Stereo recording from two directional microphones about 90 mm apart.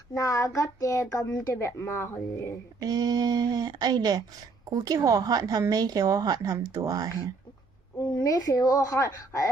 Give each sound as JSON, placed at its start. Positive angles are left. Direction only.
{"t": 0.1, "sound": "a child's voice", "side_deg": 40}
{"t": 2.8, "sound": "a woman's voice", "side_deg": -50}
{"t": 8.2, "sound": "a child's voice", "side_deg": 40}